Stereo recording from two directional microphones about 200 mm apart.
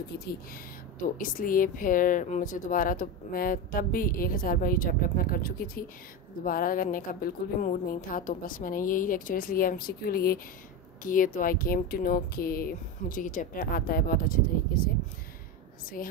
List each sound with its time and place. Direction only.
0.9 s a woman's voice: 45° left (ahead or behind)